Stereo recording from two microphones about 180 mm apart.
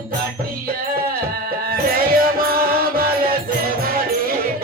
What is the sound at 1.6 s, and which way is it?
Music, 55° right (ahead or behind).